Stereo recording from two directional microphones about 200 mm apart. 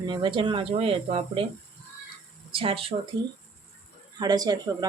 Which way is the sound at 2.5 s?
30° right (ahead or behind).